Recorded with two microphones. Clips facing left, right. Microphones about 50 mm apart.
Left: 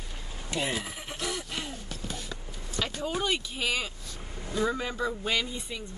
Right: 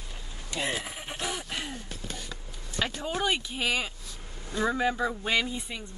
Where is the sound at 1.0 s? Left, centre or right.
Centre.